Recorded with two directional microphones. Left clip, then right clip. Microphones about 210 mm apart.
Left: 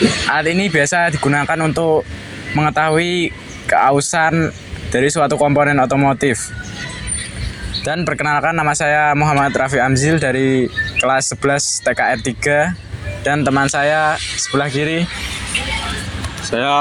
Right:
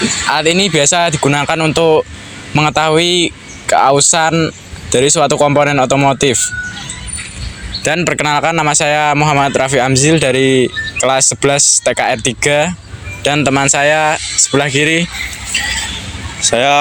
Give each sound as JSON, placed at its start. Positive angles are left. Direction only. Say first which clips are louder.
{"t": 0.3, "sound": "speech", "louder": "right 4 dB", "side_deg": -50}
{"t": 7.8, "sound": "speech", "louder": "right 5 dB", "side_deg": -50}
{"t": 16.5, "sound": "speech", "louder": "right 6 dB", "side_deg": -50}